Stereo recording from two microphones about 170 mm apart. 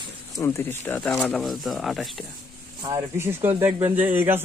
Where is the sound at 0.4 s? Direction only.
15° left (ahead or behind).